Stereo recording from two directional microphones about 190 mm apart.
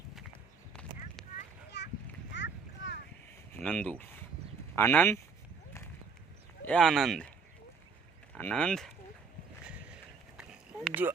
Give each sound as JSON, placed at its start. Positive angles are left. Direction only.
{"t": 0.7, "sound": "clip-clop", "side_deg": 5}
{"t": 1.7, "sound": "children playing", "side_deg": 65}
{"t": 2.3, "sound": "a sound", "side_deg": 75}
{"t": 3.6, "sound": "speech", "side_deg": 5}
{"t": 6.7, "sound": "speech", "side_deg": 5}
{"t": 8.4, "sound": "speech", "side_deg": 5}
{"t": 9.6, "sound": "a sound", "side_deg": -5}